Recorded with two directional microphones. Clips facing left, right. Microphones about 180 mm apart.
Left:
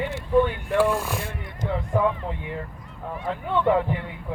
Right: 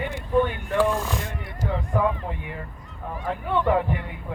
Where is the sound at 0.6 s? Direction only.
10° left (ahead or behind).